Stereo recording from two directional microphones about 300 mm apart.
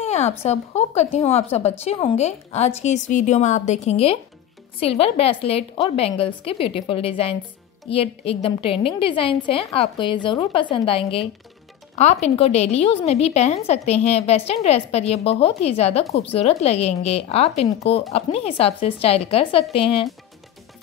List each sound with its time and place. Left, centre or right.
0.0 s a woman's voice: left